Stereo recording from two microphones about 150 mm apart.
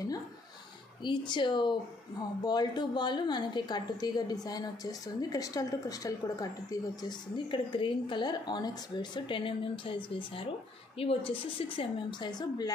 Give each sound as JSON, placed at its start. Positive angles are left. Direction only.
{"t": 1.0, "sound": "a woman's voice", "side_deg": 30}